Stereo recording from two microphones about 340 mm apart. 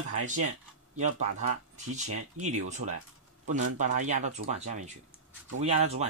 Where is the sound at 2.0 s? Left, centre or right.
Right.